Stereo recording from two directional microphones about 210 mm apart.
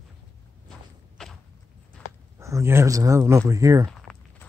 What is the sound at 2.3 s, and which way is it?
Speech, 15° right (ahead or behind).